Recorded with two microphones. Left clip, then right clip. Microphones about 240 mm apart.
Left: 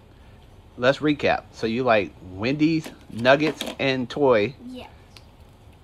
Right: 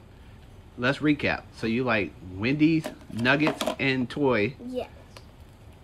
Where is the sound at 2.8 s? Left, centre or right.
Centre.